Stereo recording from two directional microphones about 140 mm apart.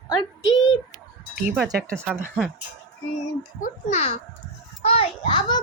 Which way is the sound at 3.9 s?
45° left (ahead or behind).